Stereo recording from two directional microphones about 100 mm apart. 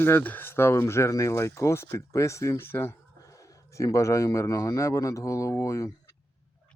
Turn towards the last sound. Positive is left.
turn(degrees=30)  # may be behind; listen again after turning